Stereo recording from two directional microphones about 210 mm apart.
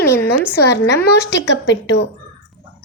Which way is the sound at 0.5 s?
55° left (ahead or behind).